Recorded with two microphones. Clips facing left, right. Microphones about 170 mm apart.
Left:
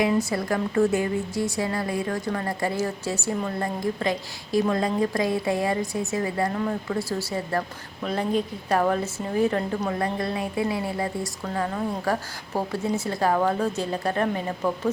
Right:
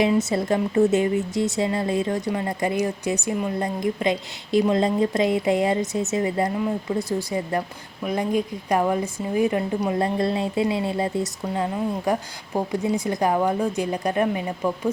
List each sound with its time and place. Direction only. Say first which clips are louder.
0.1 s a woman's voice: right 3 dB; 20° right (ahead or behind)
10.0 s a woman's voice: right 4 dB; 25° right (ahead or behind)